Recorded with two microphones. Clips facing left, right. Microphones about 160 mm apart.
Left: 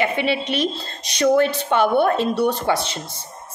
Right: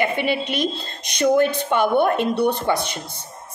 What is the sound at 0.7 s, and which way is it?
Speech, 55° right (ahead or behind).